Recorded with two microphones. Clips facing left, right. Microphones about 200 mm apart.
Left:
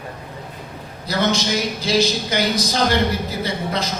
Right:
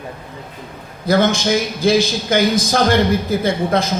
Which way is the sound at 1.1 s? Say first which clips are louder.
Right 5 dB; 50° right (ahead or behind).